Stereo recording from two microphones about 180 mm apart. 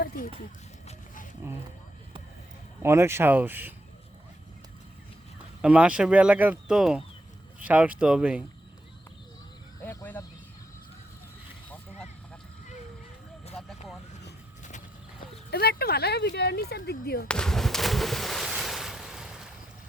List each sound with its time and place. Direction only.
0.9 s roaring cats: 45° left (ahead or behind)
2.8 s speech: 15° right (ahead or behind)
5.6 s speech: 5° right (ahead or behind)
9.8 s a sound: 10° left (ahead or behind)
15.4 s speech: 60° left (ahead or behind)
17.2 s ocean: 5° left (ahead or behind)